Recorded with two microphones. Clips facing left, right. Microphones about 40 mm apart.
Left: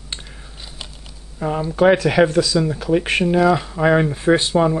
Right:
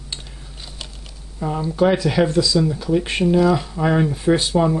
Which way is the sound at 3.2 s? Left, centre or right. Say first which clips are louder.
Right 1 dB; centre.